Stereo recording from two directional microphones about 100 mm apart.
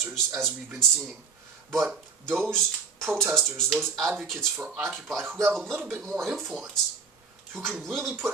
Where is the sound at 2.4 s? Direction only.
5° left (ahead or behind).